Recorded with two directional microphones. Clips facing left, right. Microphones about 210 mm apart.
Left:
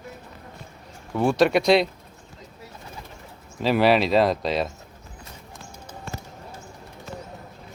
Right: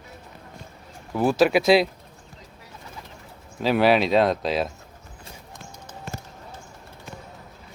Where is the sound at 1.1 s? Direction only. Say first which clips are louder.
Even; 5° right (ahead or behind).